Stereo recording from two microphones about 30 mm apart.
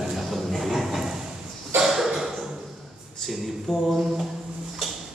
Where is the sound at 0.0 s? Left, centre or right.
Centre.